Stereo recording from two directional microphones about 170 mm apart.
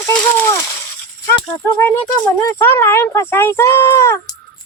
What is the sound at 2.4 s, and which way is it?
Speech, 15° left (ahead or behind).